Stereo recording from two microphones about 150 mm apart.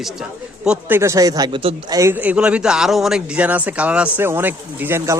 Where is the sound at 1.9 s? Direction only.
15° right (ahead or behind).